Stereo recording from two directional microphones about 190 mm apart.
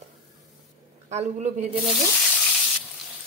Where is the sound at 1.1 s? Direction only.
35° right (ahead or behind).